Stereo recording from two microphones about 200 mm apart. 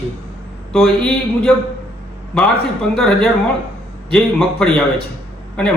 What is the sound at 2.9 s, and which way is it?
A man's voice, centre (ahead or behind).